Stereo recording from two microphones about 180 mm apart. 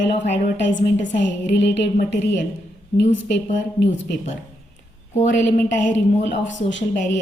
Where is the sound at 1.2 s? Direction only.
75° left (ahead or behind).